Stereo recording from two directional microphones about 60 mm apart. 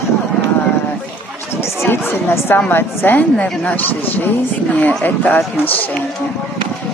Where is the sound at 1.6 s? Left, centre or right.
Left.